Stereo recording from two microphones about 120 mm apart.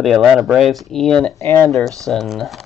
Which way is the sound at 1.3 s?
20° left (ahead or behind).